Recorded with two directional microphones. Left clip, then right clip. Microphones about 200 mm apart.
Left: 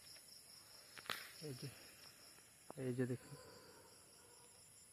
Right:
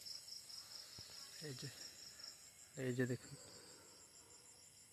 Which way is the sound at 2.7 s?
10° right (ahead or behind).